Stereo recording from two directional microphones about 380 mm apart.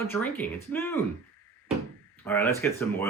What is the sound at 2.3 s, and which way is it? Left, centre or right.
Speech, centre.